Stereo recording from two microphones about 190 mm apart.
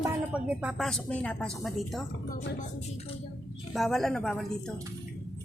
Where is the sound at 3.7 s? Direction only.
Centre (ahead or behind).